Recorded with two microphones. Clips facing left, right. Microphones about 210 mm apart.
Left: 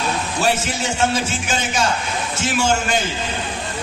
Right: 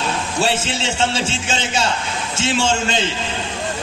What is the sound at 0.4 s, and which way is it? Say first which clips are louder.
A man's voice: even; 25° right (ahead or behind).